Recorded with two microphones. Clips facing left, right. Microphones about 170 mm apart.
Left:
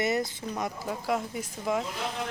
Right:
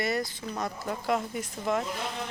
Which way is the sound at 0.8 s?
5° left (ahead or behind).